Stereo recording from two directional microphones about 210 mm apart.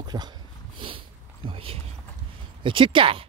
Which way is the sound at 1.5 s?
25° right (ahead or behind).